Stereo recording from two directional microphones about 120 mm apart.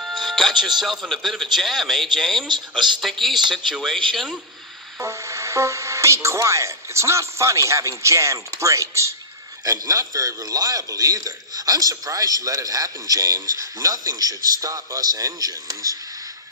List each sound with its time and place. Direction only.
0.0 s speech: centre (ahead or behind)
5.0 s a man's voice: 25° right (ahead or behind)